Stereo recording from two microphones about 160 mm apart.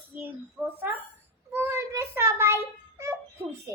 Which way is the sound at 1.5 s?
20° right (ahead or behind).